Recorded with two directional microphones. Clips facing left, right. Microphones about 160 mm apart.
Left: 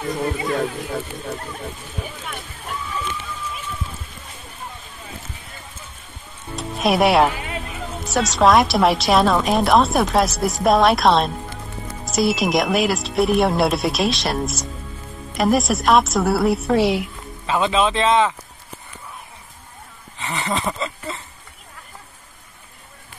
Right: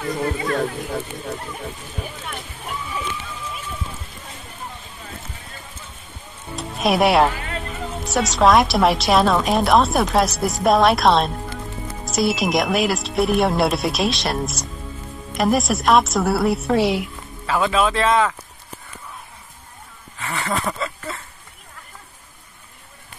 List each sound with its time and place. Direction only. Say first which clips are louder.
0.5 s a woman's voice: even; centre (ahead or behind)
6.5 s music: left 1 dB; centre (ahead or behind)
8.0 s a woman's voice: even; centre (ahead or behind)
17.5 s speech: even; 20° left (ahead or behind)
20.2 s a sound: even; 15° left (ahead or behind)